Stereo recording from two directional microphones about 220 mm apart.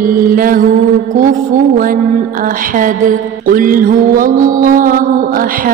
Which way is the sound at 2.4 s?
40° right (ahead or behind).